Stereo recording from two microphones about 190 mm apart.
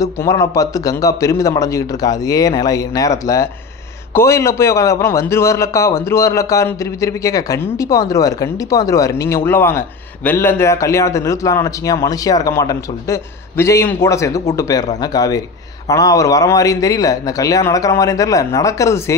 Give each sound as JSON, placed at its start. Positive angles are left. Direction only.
{"t": 0.0, "sound": "a man's voice", "side_deg": 20}